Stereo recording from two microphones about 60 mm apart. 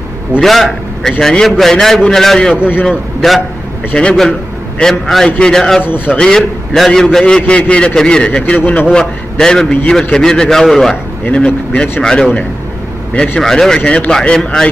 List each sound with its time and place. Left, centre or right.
0.4 s a man's voice: centre
2.7 s a man's voice: left
3.2 s a man's voice: centre
3.9 s a man's voice: centre
5.8 s a man's voice: left
6.1 s a man's voice: centre; by 8.8 s left
9.4 s a man's voice: centre
11.2 s a man's voice: centre
13.4 s a man's voice: centre
13.7 s a man's voice: centre